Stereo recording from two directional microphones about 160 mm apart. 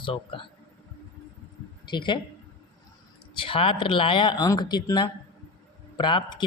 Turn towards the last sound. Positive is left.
turn(degrees=30)  # may be behind; listen again after turning